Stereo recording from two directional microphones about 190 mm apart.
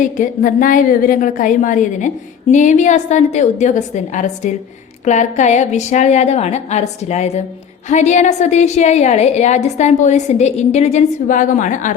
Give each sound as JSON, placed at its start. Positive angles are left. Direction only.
{"t": 0.0, "sound": "a woman's voice", "side_deg": 45}